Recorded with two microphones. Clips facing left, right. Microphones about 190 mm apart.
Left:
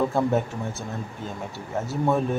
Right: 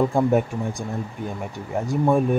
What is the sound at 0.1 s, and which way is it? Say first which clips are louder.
Speech: right 3 dB; 15° right (ahead or behind).